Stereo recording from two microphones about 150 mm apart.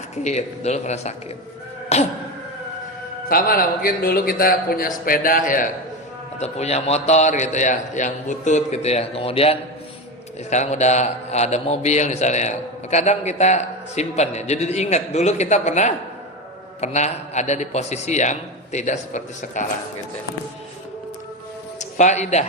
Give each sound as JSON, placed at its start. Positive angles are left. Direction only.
{"t": 0.3, "sound": "a man's voice", "side_deg": 45}
{"t": 1.9, "sound": "cough", "side_deg": 45}
{"t": 3.2, "sound": "a man's voice", "side_deg": 75}
{"t": 6.4, "sound": "a man's voice", "side_deg": 45}
{"t": 21.8, "sound": "a man's voice", "side_deg": 55}